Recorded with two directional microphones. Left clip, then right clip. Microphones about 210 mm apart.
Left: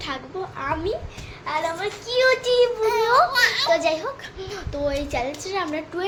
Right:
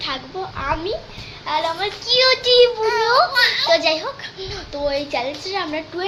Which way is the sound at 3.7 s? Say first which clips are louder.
Right 4 dB; centre (ahead or behind).